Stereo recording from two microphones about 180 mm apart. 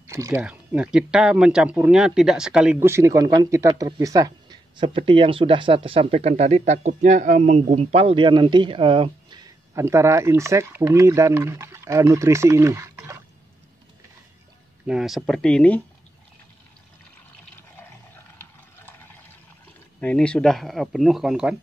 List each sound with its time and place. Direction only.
0.0 s a sound: 15° right (ahead or behind)
0.4 s speech: 5° right (ahead or behind)
14.9 s speech: centre (ahead or behind)
20.0 s speech: 5° left (ahead or behind)